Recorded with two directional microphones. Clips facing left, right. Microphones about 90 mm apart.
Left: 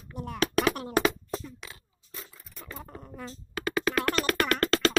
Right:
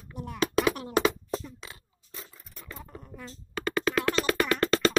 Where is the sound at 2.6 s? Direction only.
45° left (ahead or behind).